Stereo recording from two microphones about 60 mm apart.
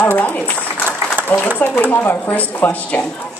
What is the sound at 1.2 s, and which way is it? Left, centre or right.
A woman's voice, left.